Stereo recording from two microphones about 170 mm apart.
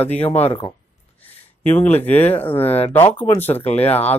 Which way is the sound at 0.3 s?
40° left (ahead or behind).